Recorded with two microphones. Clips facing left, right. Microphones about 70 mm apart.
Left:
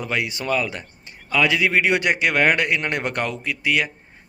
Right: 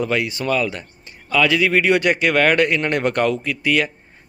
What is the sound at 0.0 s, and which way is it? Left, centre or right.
A man's voice, centre.